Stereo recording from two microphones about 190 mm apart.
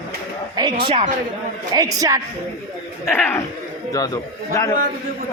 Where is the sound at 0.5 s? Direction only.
25° right (ahead or behind).